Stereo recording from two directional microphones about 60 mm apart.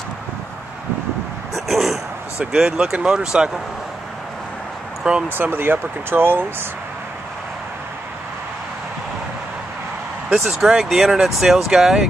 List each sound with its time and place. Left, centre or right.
1.5 s a sound: centre
2.5 s speech: centre
5.3 s speech: right
10.4 s speech: centre